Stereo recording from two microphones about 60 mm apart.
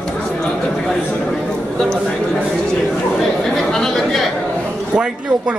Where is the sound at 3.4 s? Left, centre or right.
Centre.